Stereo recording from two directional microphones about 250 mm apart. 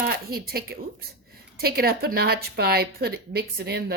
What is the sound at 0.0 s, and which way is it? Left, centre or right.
A woman's voice, right.